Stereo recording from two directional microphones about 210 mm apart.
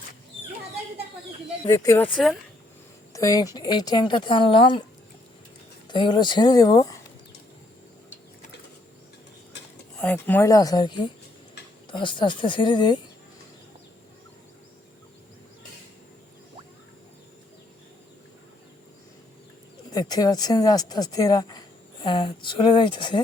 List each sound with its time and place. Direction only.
1.6 s speech: 15° left (ahead or behind)
3.1 s speech: 15° left (ahead or behind)
5.9 s speech: 20° left (ahead or behind)
10.0 s speech: 10° left (ahead or behind)
19.9 s speech: 20° left (ahead or behind)